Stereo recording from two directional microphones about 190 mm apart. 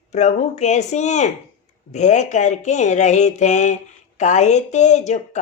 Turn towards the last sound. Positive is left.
turn(degrees=35)  # may be behind; listen again after turning